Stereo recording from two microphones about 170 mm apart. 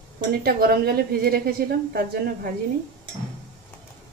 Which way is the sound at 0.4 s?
60° right (ahead or behind).